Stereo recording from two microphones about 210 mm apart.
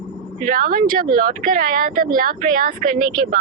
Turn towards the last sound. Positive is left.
turn(degrees=-40)  # may be behind; listen again after turning